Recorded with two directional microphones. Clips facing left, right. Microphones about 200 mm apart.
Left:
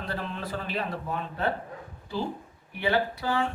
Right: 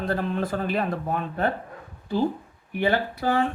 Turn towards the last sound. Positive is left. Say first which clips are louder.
# right 3 dB
turn(degrees=-55)  # may be behind; listen again after turning